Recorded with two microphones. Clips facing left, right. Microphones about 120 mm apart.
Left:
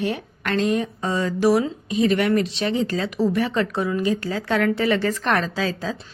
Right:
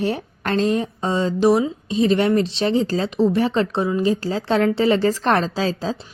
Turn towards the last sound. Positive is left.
turn(degrees=-30)  # may be behind; listen again after turning